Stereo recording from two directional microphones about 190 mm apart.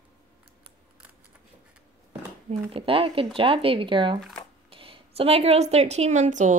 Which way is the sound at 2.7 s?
30° right (ahead or behind).